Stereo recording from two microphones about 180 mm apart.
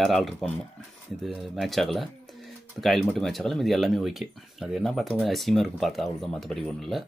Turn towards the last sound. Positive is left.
turn(degrees=0)  # may be behind; listen again after turning